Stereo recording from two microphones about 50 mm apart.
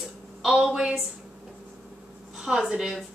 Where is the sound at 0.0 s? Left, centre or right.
Centre.